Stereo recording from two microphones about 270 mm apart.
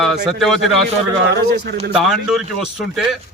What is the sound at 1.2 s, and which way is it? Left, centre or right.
Speech, right.